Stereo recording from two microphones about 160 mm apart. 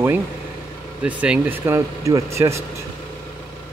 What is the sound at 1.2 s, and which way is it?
Speech, 10° right (ahead or behind).